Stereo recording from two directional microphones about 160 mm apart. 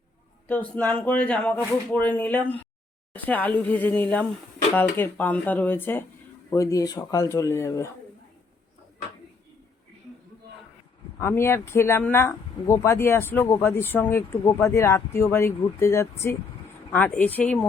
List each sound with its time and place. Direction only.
0.4 s speech: 10° left (ahead or behind)
11.2 s speech: 15° left (ahead or behind)